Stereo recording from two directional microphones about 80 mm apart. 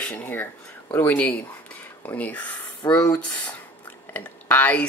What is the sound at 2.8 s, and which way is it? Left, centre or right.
Speech, left.